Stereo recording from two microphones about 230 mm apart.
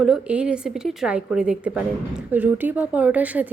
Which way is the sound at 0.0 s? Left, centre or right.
Centre.